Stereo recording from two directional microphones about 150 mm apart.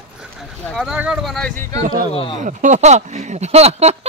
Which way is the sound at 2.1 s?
35° left (ahead or behind).